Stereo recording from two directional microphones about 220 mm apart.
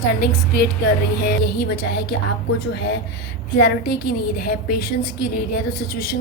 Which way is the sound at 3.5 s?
50° left (ahead or behind).